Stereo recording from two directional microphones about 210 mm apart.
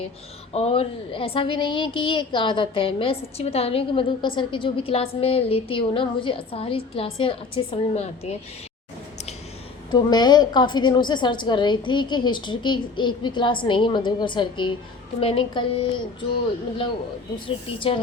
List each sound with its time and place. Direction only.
0.5 s a woman's voice: 30° left (ahead or behind)
9.9 s a woman's voice: 20° left (ahead or behind)
17.7 s a woman's voice: 25° left (ahead or behind)